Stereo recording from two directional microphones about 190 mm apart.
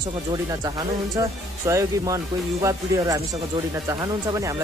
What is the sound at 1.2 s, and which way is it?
Speech, 15° right (ahead or behind).